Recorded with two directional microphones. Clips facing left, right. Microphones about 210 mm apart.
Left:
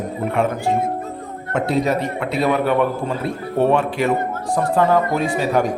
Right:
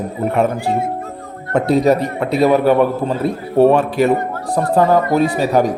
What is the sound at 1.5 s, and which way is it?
A man's voice, 40° right (ahead or behind).